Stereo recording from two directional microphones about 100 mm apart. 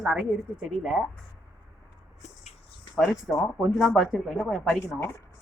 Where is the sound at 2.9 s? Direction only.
Centre (ahead or behind).